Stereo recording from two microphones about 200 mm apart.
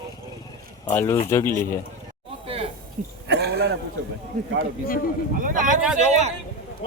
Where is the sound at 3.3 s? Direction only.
55° right (ahead or behind).